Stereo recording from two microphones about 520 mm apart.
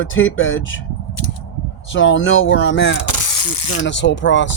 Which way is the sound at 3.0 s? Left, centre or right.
Left.